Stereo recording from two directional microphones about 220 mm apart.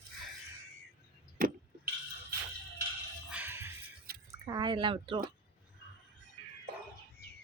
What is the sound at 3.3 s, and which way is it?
Music, 10° right (ahead or behind).